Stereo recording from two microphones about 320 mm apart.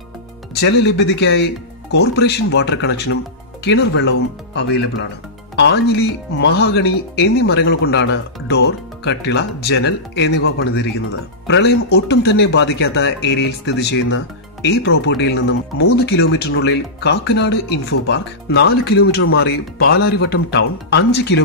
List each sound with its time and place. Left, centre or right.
0.6 s speech: left
5.6 s speech: left